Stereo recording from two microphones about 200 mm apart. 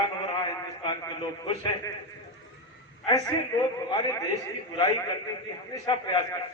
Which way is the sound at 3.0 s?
20° left (ahead or behind).